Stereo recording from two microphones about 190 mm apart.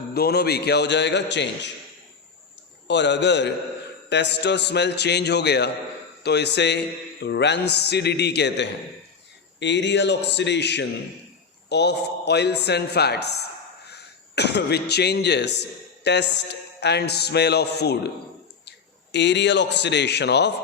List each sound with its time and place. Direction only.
0.1 s speech: 55° left (ahead or behind)
2.8 s a man's voice: 70° left (ahead or behind)
19.1 s speech: 65° left (ahead or behind)